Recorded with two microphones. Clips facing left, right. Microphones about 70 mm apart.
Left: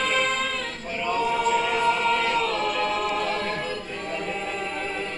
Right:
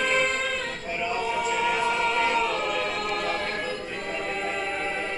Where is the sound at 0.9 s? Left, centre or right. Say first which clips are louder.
Left 4 dB; centre.